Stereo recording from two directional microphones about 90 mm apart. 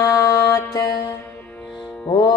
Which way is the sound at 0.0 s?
40° left (ahead or behind).